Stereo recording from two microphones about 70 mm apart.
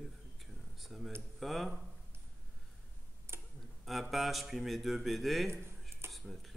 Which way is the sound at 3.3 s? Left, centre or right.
Right.